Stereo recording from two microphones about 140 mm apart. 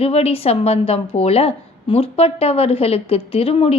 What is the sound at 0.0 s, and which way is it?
A woman's voice, 45° left (ahead or behind).